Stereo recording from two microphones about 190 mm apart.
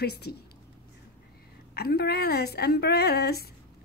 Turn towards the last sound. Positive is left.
turn(degrees=55)  # may be behind; listen again after turning